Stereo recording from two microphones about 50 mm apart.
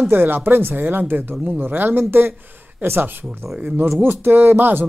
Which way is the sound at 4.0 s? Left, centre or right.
Right.